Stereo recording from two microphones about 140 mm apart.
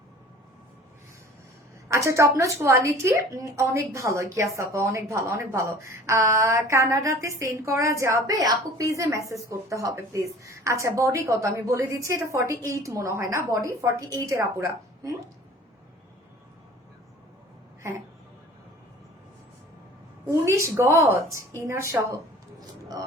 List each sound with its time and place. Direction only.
1.9 s a woman's voice: 20° right (ahead or behind)
20.4 s a woman's voice: 20° right (ahead or behind)